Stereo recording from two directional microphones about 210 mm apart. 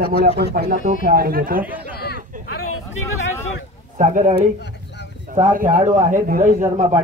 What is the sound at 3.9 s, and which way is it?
Speech, 35° right (ahead or behind).